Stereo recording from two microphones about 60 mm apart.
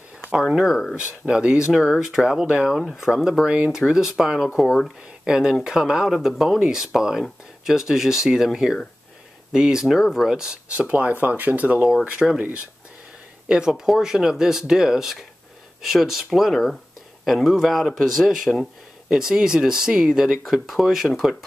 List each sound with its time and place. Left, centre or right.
0.3 s speech: centre; by 3.7 s right
3.7 s speech: centre
10.7 s speech: right
13.5 s speech: centre
20.4 s speech: centre